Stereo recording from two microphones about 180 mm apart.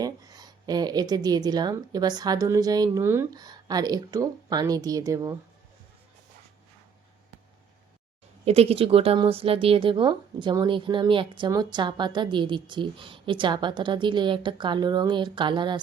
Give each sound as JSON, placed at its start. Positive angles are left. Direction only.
{"t": 0.0, "sound": "a woman's voice", "side_deg": -20}
{"t": 8.4, "sound": "a woman's voice", "side_deg": -35}